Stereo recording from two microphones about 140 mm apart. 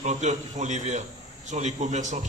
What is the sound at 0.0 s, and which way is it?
A man's voice, 55° right (ahead or behind).